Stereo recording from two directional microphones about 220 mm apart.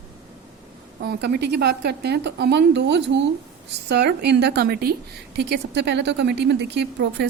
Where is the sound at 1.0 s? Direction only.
45° right (ahead or behind).